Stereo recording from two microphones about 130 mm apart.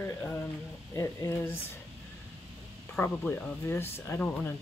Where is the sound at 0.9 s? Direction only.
20° left (ahead or behind).